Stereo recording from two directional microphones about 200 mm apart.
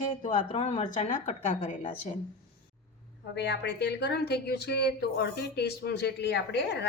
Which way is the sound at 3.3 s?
55° left (ahead or behind).